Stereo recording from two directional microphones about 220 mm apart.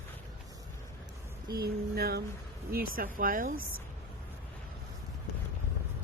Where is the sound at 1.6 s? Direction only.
45° right (ahead or behind).